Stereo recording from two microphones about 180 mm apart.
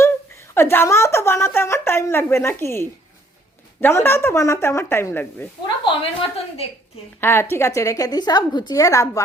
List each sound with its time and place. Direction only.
0.5 s a woman's voice: 15° left (ahead or behind)
5.6 s a woman's voice: 30° left (ahead or behind)
7.2 s a woman's voice: 15° left (ahead or behind)